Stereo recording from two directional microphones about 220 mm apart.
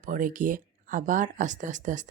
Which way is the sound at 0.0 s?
40° right (ahead or behind).